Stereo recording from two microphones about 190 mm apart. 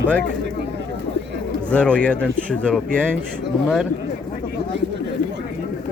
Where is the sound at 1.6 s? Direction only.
5° left (ahead or behind).